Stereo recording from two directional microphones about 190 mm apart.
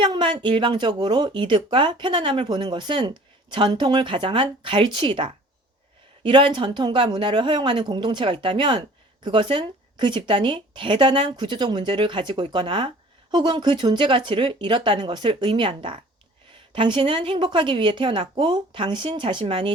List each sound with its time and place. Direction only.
0.0 s speech: 25° right (ahead or behind)